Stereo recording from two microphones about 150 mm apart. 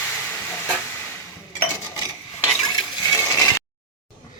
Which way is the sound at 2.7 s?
25° left (ahead or behind).